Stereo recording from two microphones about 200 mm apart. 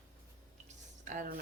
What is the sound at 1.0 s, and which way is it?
Speech, 40° right (ahead or behind).